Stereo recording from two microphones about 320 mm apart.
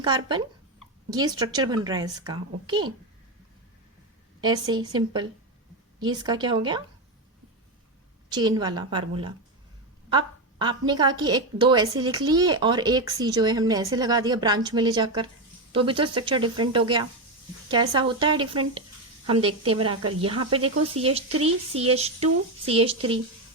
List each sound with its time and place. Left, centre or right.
0.0 s a woman's voice: centre
4.4 s a sound: centre
4.7 s a woman's voice: centre
8.3 s a woman's voice: centre